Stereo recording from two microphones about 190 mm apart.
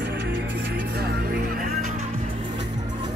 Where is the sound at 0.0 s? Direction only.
65° right (ahead or behind).